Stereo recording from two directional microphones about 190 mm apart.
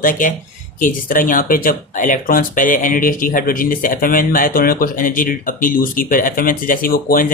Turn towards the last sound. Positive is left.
turn(degrees=50)  # may be behind; listen again after turning